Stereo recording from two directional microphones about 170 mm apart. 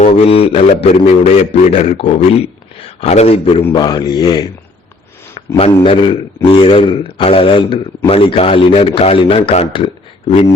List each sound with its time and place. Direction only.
0.2 s speech: 35° left (ahead or behind)
5.8 s speech: 30° left (ahead or behind)